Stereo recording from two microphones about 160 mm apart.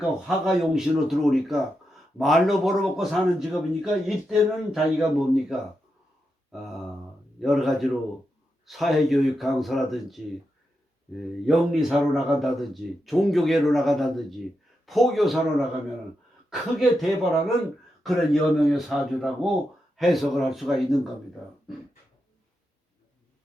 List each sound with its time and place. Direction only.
0.3 s a man's voice: centre (ahead or behind)
11.2 s a man's voice: centre (ahead or behind)
16.5 s a man's voice: centre (ahead or behind)